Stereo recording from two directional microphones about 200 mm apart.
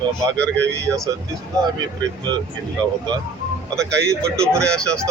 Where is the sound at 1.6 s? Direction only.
15° right (ahead or behind).